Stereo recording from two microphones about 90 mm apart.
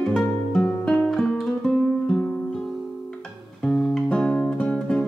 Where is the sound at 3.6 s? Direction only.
Centre (ahead or behind).